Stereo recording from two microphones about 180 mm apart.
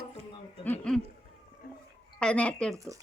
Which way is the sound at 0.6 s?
10° left (ahead or behind).